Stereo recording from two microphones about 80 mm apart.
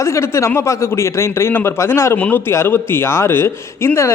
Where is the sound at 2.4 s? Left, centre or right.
Left.